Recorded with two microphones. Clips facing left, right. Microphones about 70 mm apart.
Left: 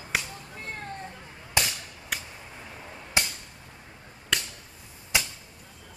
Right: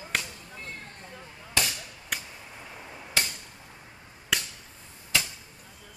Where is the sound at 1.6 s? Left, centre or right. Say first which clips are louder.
Left 1 dB; centre.